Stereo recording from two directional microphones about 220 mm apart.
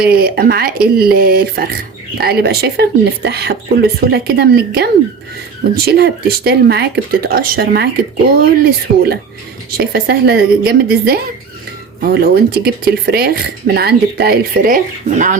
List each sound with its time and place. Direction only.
0.0 s speech: 45° right (ahead or behind)